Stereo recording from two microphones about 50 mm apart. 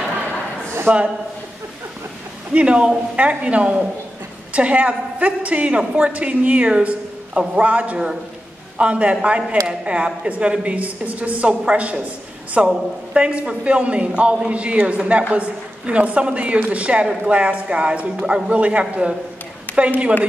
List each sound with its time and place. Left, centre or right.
0.8 s a woman's voice: right
2.5 s a woman's voice: right
19.7 s a sound: left